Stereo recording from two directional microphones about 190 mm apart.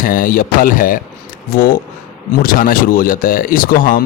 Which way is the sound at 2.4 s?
50° left (ahead or behind).